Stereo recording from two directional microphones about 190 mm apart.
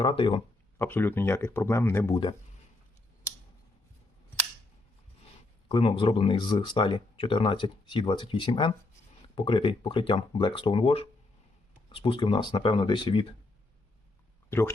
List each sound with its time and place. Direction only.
0.0 s speech: 30° left (ahead or behind)
0.8 s speech: 10° left (ahead or behind)
5.6 s speech: 30° left (ahead or behind)